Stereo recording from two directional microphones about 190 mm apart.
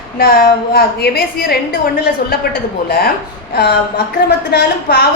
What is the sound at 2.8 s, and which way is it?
Speech, 55° left (ahead or behind).